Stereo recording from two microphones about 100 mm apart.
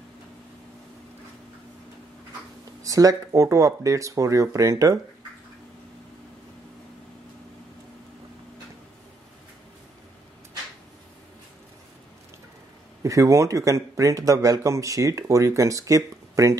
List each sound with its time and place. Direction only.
2.8 s speech: 35° right (ahead or behind)
13.0 s speech: 30° right (ahead or behind)